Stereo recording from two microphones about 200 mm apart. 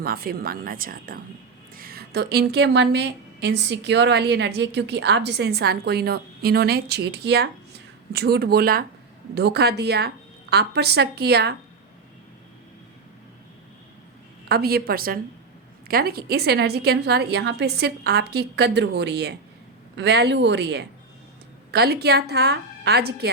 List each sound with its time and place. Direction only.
0.0 s a woman's voice: 50° right (ahead or behind)
14.5 s a woman's voice: 50° right (ahead or behind)